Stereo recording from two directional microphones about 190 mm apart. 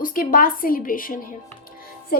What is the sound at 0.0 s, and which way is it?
A woman's voice, 45° left (ahead or behind).